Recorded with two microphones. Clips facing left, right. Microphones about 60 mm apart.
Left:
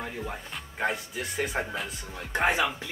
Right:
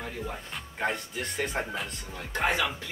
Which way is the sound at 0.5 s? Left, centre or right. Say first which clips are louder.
Left 1 dB; centre.